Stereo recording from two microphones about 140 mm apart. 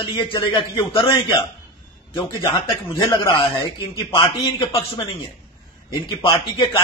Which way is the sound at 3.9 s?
40° left (ahead or behind).